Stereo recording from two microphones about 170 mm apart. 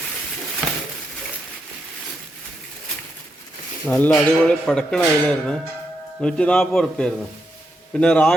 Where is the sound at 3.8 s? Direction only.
10° left (ahead or behind).